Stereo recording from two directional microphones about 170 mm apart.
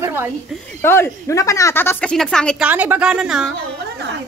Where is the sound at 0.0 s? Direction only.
15° right (ahead or behind).